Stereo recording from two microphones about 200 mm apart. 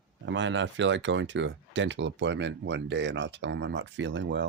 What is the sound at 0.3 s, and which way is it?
Speech, 65° right (ahead or behind).